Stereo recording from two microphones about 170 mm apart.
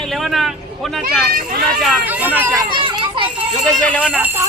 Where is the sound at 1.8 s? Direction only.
Centre (ahead or behind).